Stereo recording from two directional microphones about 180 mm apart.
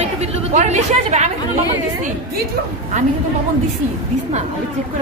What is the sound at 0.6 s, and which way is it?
Speech, 40° right (ahead or behind).